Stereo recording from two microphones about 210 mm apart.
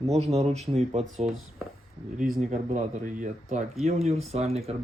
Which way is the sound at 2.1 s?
40° right (ahead or behind).